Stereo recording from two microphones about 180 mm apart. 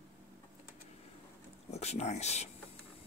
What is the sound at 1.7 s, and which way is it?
Speech, 35° left (ahead or behind).